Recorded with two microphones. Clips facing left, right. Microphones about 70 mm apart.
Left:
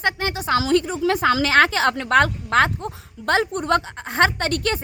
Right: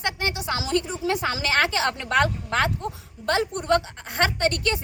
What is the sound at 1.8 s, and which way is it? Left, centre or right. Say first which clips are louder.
A woman's voice: left 5 dB; left.